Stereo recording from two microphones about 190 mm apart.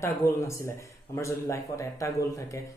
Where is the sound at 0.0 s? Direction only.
15° left (ahead or behind).